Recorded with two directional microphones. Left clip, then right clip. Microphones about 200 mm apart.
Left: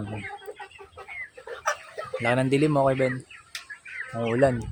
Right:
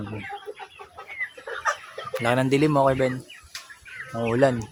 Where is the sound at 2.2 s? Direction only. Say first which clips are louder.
Right 2 dB; centre (ahead or behind).